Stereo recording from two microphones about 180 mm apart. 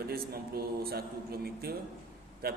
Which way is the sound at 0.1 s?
60° right (ahead or behind).